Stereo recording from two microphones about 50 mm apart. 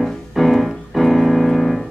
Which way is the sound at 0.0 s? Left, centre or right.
Centre.